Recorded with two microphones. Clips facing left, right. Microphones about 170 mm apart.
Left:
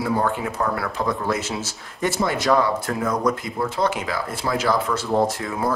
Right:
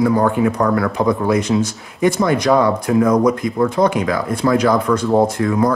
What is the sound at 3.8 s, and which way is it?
Speech, 45° right (ahead or behind).